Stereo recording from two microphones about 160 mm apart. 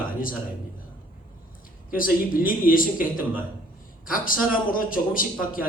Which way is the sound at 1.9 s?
60° left (ahead or behind).